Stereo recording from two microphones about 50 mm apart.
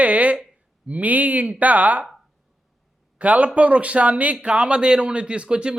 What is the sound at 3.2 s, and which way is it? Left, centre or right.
A man's voice, right.